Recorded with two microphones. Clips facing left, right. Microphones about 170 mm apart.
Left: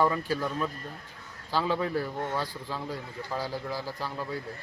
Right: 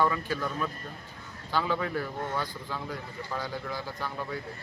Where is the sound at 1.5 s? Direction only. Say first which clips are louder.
Left 1 dB; 30° left (ahead or behind).